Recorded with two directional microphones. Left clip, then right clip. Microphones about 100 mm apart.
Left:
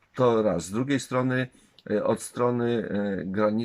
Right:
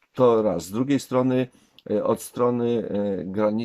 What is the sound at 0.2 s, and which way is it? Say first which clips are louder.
Speech: right 3 dB; 25° right (ahead or behind).